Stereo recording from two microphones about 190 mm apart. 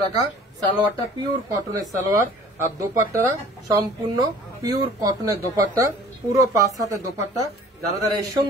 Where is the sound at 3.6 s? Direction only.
20° right (ahead or behind).